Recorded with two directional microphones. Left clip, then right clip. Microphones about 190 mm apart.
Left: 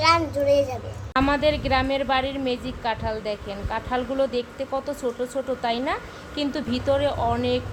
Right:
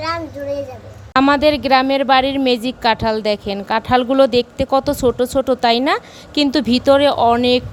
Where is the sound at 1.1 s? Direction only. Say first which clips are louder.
Right 8 dB; 45° right (ahead or behind).